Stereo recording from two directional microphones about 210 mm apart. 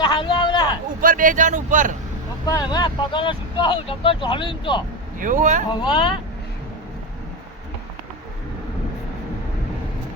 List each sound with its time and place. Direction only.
0.0 s a sound: 20° left (ahead or behind)
1.0 s speech: 40° right (ahead or behind)
2.5 s speech: 20° left (ahead or behind)
5.2 s speech: 40° right (ahead or behind)
5.8 s speech: 25° left (ahead or behind)